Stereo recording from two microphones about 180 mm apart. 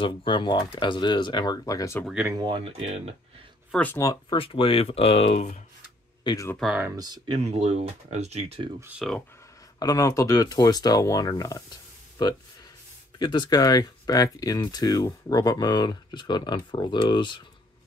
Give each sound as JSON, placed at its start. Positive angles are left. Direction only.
{"t": 0.0, "sound": "speech", "side_deg": 25}
{"t": 2.0, "sound": "speech", "side_deg": -10}
{"t": 2.3, "sound": "speech", "side_deg": -25}
{"t": 3.7, "sound": "speech", "side_deg": 10}
{"t": 4.4, "sound": "speech", "side_deg": 30}
{"t": 6.2, "sound": "speech", "side_deg": 20}
{"t": 6.5, "sound": "speech", "side_deg": 0}
{"t": 7.2, "sound": "speech", "side_deg": -35}
{"t": 8.8, "sound": "speech", "side_deg": -5}
{"t": 9.8, "sound": "speech", "side_deg": 20}
{"t": 13.2, "sound": "speech", "side_deg": 25}